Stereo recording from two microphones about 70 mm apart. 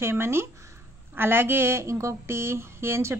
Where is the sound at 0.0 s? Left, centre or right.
Right.